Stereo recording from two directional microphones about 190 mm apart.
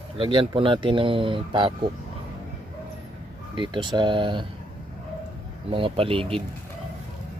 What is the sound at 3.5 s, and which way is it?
Speech, 25° right (ahead or behind).